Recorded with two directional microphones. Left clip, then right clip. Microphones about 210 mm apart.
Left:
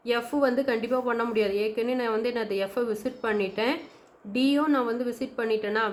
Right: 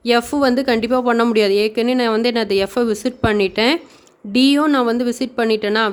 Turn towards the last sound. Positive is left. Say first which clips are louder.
# right 9 dB
turn(degrees=-50)  # may be behind; listen again after turning